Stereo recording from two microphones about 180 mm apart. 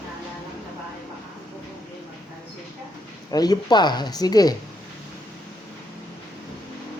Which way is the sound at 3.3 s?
20° left (ahead or behind).